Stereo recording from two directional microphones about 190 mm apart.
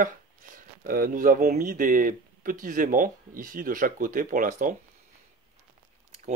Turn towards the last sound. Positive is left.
turn(degrees=-45)  # may be behind; listen again after turning